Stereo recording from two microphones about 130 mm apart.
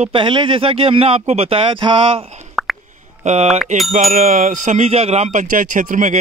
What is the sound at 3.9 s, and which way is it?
Speech, 90° right.